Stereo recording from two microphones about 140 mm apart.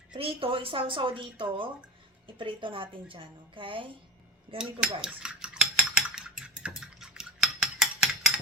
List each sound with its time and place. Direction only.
0.1 s speech: 40° right (ahead or behind)
4.5 s dishes: 5° right (ahead or behind)